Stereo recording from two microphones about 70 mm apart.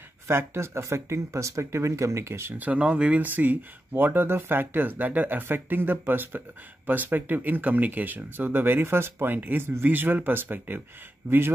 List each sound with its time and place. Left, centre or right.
0.3 s speech: right
2.5 s speech: right